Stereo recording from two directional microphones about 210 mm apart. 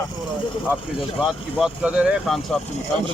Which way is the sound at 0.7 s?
Centre (ahead or behind).